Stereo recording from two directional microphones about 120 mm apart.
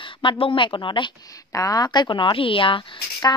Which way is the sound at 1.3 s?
30° left (ahead or behind).